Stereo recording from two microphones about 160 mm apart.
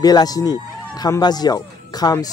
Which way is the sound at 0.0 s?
25° left (ahead or behind).